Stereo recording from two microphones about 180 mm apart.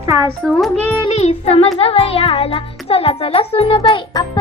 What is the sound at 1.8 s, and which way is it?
Music, 35° left (ahead or behind).